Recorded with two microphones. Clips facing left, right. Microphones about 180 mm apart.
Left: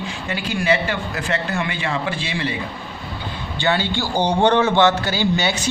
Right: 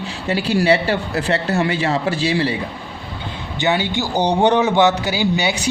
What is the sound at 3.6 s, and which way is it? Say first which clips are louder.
A man's voice: right 2 dB; 15° right (ahead or behind).